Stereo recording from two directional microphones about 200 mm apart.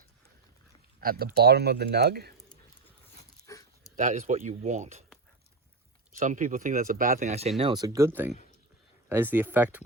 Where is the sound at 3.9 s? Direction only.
40° right (ahead or behind).